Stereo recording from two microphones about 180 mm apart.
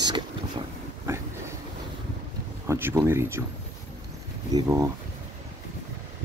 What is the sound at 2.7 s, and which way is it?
Speech, 10° right (ahead or behind).